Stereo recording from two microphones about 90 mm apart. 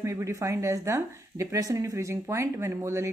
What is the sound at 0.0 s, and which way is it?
Speech, 35° right (ahead or behind).